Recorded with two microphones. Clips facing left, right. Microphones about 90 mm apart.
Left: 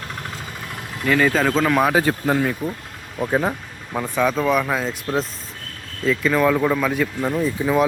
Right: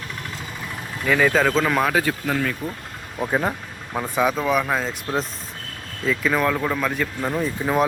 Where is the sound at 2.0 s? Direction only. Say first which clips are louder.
Left 3 dB; 30° left (ahead or behind).